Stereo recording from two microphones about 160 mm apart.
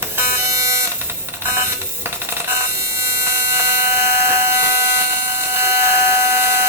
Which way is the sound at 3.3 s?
15° right (ahead or behind).